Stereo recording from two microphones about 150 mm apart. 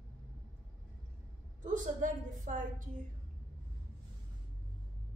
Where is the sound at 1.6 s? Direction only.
60° right (ahead or behind).